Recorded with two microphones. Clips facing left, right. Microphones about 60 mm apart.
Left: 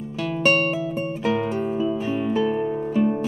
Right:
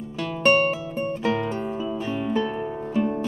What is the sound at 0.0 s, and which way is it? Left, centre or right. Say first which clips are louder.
Music: even; centre.